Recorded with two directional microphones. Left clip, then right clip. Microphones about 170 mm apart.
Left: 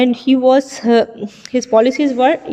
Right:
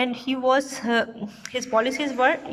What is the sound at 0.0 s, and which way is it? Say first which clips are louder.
A woman's voice: left 11 dB; 25° left (ahead or behind).